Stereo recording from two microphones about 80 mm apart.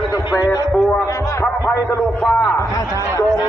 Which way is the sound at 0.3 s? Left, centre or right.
Left.